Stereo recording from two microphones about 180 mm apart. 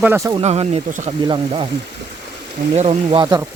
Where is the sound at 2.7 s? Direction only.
35° right (ahead or behind).